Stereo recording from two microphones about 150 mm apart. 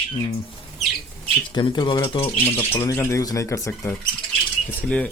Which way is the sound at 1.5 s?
30° left (ahead or behind).